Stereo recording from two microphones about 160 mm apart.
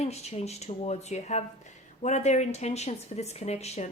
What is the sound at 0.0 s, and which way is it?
Speech, 40° left (ahead or behind).